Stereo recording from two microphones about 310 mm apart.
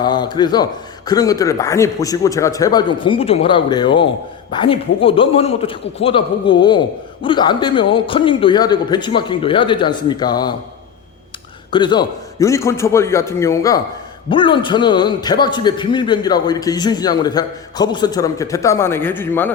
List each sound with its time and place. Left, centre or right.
0.0 s a man's voice: centre
11.7 s a man's voice: centre